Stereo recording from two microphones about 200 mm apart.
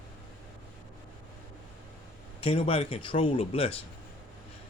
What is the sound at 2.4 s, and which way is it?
Speech, 30° left (ahead or behind).